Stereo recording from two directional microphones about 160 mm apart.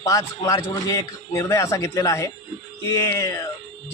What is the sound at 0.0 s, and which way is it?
A man's voice, 20° left (ahead or behind).